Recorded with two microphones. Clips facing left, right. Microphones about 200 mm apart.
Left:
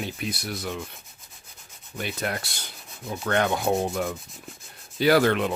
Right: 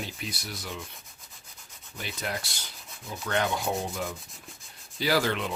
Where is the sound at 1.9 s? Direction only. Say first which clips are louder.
Left 5 dB; 55° left (ahead or behind).